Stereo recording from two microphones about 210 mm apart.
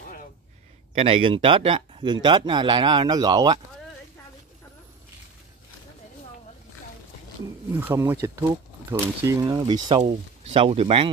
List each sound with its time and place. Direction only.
0.9 s speech: 30° right (ahead or behind)
7.7 s speech: 10° right (ahead or behind); by 11.1 s 25° right (ahead or behind)